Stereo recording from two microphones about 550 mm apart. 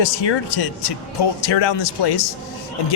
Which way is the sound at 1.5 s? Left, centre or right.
Left.